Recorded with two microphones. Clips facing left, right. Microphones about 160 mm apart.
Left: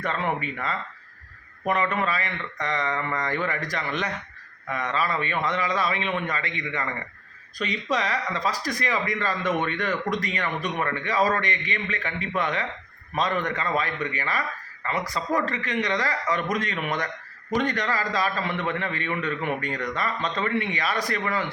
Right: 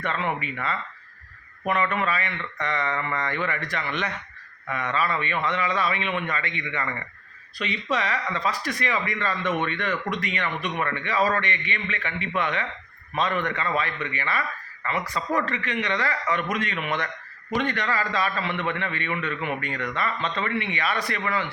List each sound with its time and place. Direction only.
0.0 s speech: 40° left (ahead or behind)